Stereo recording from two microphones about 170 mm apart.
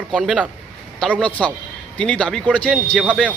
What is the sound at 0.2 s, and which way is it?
Speech, 5° left (ahead or behind).